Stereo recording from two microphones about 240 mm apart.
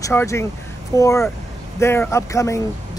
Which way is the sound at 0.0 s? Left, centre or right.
Centre.